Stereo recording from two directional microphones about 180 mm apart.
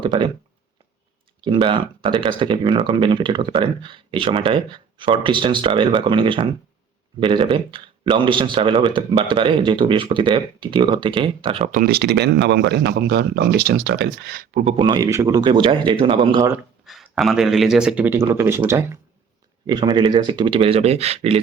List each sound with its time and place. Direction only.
0.0 s speech: 25° right (ahead or behind)
1.4 s speech: 30° right (ahead or behind)
11.7 s speech: 55° right (ahead or behind)
14.5 s speech: 35° right (ahead or behind)
14.8 s speech: 20° right (ahead or behind)
16.8 s speech: centre (ahead or behind)
19.6 s speech: 25° right (ahead or behind)